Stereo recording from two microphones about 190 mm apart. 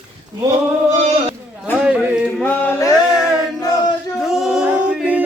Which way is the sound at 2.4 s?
15° left (ahead or behind).